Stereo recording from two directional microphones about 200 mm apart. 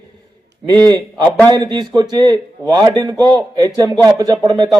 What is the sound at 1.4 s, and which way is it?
Speech, 20° right (ahead or behind).